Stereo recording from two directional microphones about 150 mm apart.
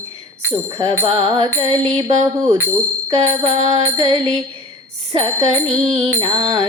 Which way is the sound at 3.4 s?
40° right (ahead or behind).